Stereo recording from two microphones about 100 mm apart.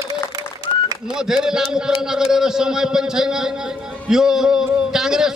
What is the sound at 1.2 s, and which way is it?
A man's voice, 5° right (ahead or behind).